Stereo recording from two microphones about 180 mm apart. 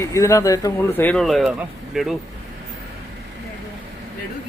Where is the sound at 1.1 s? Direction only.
Centre (ahead or behind).